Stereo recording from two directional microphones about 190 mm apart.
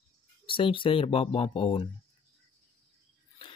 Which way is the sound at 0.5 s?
25° left (ahead or behind).